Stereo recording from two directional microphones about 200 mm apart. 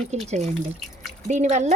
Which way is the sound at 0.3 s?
35° right (ahead or behind).